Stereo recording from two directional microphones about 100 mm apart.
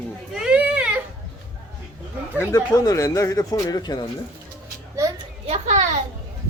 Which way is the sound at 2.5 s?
35° left (ahead or behind).